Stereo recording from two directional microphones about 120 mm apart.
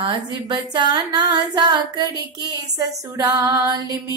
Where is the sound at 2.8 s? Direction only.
30° right (ahead or behind).